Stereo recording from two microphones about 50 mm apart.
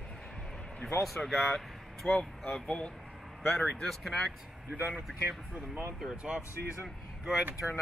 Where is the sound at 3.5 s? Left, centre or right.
Centre.